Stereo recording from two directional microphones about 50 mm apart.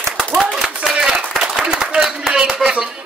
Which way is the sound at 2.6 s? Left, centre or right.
Right.